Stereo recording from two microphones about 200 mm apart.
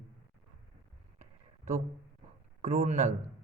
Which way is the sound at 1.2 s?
40° right (ahead or behind).